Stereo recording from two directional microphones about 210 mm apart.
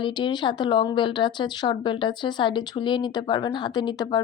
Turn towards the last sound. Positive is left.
turn(degrees=20)  # may be behind; listen again after turning